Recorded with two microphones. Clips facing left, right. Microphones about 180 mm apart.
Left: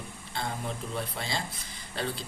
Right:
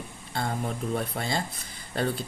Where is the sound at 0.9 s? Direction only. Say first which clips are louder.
Right 5 dB; 50° right (ahead or behind).